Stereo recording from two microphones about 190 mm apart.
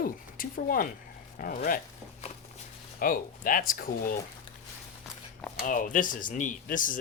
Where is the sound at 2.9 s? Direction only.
45° left (ahead or behind).